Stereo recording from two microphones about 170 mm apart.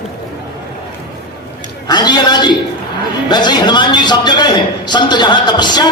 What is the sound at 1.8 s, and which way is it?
A man's voice, 25° left (ahead or behind).